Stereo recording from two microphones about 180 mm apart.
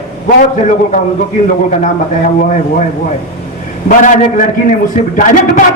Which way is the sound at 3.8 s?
45° left (ahead or behind).